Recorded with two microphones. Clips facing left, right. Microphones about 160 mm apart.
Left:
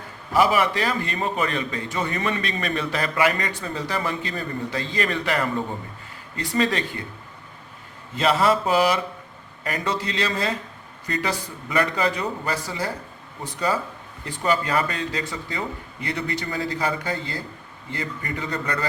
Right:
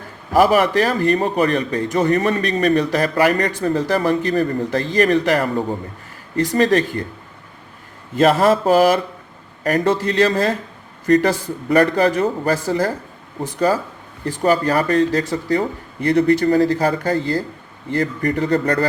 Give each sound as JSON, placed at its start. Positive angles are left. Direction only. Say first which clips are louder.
{"t": 0.3, "sound": "a man's voice", "louder": "right 6 dB", "side_deg": -45}
{"t": 8.1, "sound": "speech", "louder": "right 6 dB", "side_deg": -50}
{"t": 14.3, "sound": "speech", "louder": "right 7 dB", "side_deg": -40}